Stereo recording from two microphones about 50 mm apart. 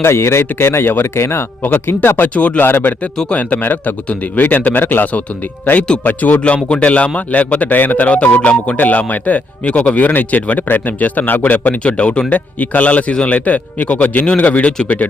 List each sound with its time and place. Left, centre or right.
0.0 s speech: left
1.2 s speech: left
1.7 s speech: left
2.3 s a man's voice: left
2.6 s a man's voice: left
6.4 s a man's voice: left
8.8 s a man's voice: left
11.8 s a man's voice: left